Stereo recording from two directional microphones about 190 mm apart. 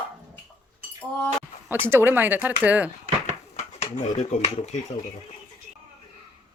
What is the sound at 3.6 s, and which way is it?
Speech, 35° left (ahead or behind).